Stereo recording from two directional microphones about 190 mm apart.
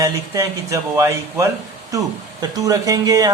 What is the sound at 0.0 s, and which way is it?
Speech, 15° right (ahead or behind).